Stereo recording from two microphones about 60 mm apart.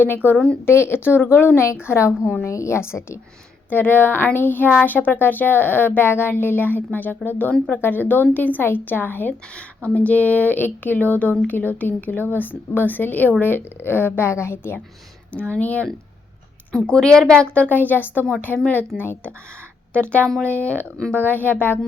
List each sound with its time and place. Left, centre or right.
0.3 s speech: centre
0.6 s a woman's voice: left
3.7 s speech: left
15.5 s speech: left
16.7 s speech: centre; by 18.9 s left
19.9 s speech: left